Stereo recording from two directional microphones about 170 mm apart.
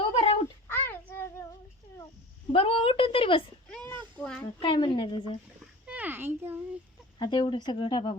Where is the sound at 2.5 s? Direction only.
35° left (ahead or behind).